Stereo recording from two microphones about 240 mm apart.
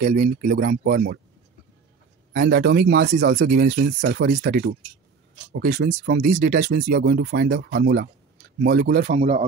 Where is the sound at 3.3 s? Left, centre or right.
Right.